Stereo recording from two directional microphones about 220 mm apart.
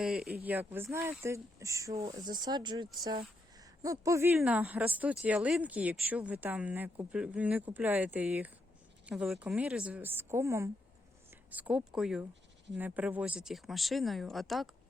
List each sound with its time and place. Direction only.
0.0 s speech: centre (ahead or behind)